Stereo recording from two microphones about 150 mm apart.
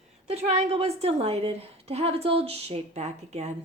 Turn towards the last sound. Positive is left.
turn(degrees=-50)  # may be behind; listen again after turning